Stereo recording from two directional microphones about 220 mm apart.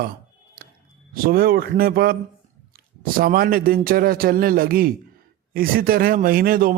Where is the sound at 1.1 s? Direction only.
40° right (ahead or behind).